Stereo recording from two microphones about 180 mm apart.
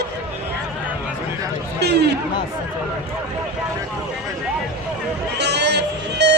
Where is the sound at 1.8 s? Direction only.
65° right (ahead or behind).